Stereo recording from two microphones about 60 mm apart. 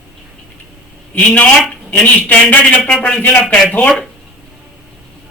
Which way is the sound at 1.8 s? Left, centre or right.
Left.